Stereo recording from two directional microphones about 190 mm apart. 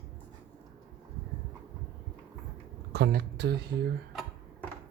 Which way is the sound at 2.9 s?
60° right (ahead or behind).